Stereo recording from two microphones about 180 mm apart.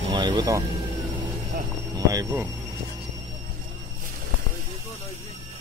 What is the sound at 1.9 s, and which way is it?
Speech, 20° right (ahead or behind).